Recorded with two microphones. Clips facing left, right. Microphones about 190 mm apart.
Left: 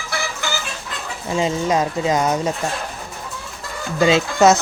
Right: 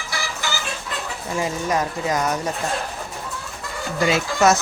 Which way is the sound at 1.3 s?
20° left (ahead or behind).